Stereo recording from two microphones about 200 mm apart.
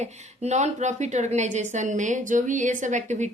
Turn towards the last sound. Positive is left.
turn(degrees=-35)  # may be behind; listen again after turning